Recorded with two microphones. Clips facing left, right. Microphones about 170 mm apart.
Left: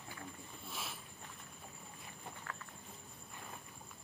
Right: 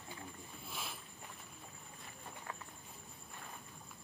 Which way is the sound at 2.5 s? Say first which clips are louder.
Right 2 dB; 15° right (ahead or behind).